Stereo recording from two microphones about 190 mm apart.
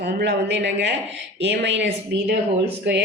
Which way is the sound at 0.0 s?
60° right (ahead or behind).